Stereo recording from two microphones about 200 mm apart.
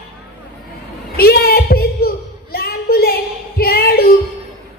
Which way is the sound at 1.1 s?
50° left (ahead or behind).